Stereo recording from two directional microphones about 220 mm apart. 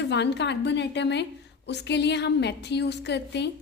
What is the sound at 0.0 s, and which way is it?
A woman's voice, 50° left (ahead or behind).